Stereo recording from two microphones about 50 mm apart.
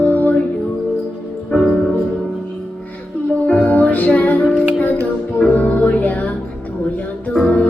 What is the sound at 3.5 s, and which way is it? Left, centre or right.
Music, left.